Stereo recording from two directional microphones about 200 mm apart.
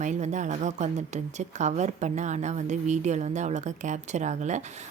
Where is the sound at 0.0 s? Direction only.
35° right (ahead or behind).